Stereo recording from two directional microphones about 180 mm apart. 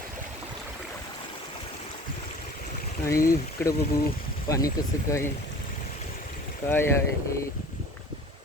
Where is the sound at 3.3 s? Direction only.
20° left (ahead or behind).